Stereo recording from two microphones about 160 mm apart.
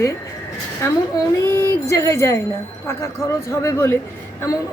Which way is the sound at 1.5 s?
15° left (ahead or behind).